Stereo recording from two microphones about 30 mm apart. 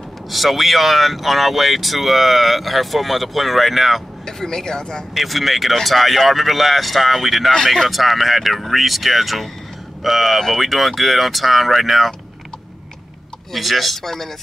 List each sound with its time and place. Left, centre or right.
0.3 s speech: centre
4.3 s speech: centre
5.1 s speech: centre
13.5 s speech: centre
14.0 s speech: centre